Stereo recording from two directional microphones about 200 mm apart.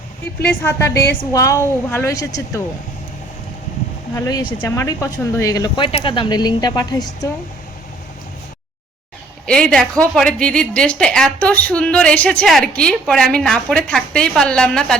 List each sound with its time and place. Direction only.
0.4 s a woman's voice: 10° left (ahead or behind)
4.1 s speech: 20° left (ahead or behind)
9.5 s a woman's voice: 5° left (ahead or behind)